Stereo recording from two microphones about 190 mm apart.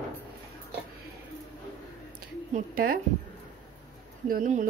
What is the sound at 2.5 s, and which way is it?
Speech, 50° right (ahead or behind).